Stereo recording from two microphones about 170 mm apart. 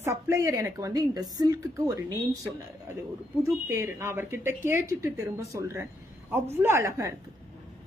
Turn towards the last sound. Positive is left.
turn(degrees=-15)  # may be behind; listen again after turning